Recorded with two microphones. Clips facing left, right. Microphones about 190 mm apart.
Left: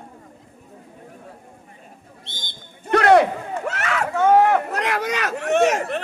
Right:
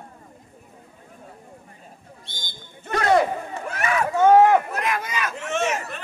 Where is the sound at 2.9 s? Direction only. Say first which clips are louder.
Left 5 dB; 65° left (ahead or behind).